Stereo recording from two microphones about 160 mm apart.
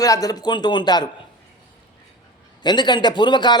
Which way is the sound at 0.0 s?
20° left (ahead or behind).